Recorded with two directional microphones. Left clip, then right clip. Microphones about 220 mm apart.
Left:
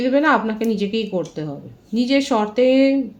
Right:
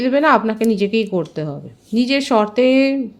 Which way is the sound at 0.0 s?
45° right (ahead or behind).